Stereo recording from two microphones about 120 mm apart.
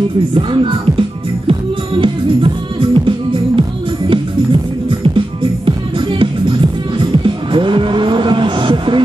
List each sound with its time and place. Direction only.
0.3 s speech: 50° right (ahead or behind)
1.5 s music: 50° right (ahead or behind)
5.0 s music: 50° right (ahead or behind)